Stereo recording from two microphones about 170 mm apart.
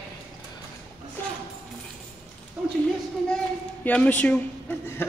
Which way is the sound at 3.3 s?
10° left (ahead or behind).